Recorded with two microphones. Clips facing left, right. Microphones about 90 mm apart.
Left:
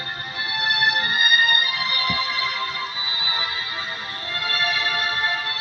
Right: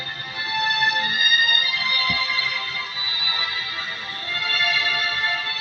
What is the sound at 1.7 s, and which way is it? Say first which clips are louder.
Music: even; 20° left (ahead or behind).